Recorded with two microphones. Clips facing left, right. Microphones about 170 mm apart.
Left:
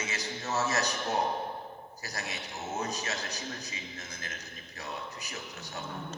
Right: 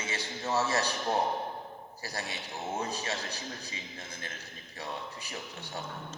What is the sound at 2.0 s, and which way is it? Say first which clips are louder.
A man's voice: right 1 dB; 30° right (ahead or behind).